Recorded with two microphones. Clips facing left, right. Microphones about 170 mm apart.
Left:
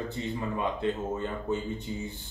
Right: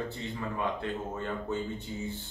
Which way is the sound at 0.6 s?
20° left (ahead or behind).